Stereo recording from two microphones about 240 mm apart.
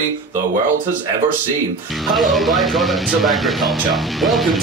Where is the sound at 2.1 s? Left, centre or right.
Centre.